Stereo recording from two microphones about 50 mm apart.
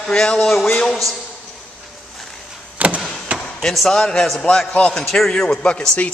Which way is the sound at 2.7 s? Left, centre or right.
Right.